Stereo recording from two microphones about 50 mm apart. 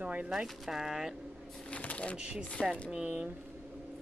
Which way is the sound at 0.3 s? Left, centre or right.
Centre.